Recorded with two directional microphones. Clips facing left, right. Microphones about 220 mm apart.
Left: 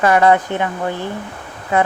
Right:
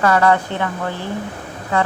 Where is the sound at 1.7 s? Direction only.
20° left (ahead or behind).